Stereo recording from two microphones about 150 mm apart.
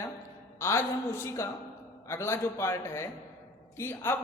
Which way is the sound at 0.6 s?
15° left (ahead or behind).